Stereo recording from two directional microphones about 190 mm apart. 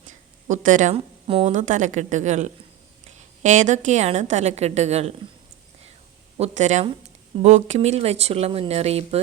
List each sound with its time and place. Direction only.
0.4 s speech: 40° right (ahead or behind)
6.3 s speech: 35° right (ahead or behind)